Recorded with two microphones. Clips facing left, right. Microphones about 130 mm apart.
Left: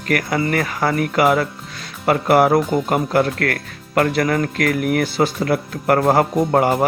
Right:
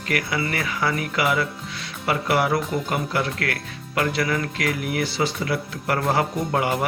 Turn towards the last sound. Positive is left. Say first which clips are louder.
# left 7 dB
turn(degrees=40)  # may be behind; listen again after turning